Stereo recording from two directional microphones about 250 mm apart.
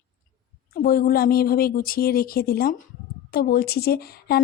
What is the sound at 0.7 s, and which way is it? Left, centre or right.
A woman's voice, left.